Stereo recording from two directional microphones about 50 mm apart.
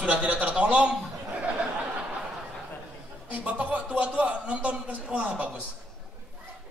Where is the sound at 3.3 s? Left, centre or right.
Right.